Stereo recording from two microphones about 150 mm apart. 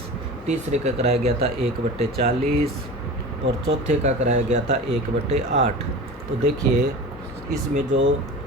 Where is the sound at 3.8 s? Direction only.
50° right (ahead or behind).